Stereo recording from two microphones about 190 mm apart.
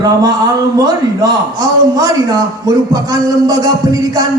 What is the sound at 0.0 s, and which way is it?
A woman's voice, 20° right (ahead or behind).